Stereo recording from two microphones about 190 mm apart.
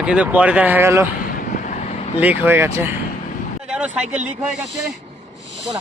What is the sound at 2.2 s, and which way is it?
Speech, 10° right (ahead or behind).